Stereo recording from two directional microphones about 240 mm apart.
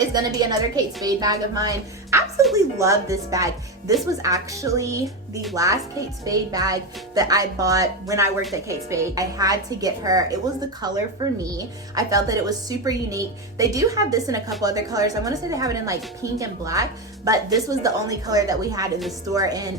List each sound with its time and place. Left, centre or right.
0.1 s a woman's voice: centre
11.5 s a woman's voice: centre